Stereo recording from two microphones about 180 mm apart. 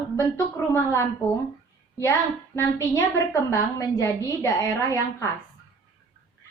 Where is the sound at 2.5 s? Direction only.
15° left (ahead or behind).